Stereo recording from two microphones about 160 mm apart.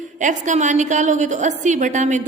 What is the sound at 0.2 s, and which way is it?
A woman's voice, 50° right (ahead or behind).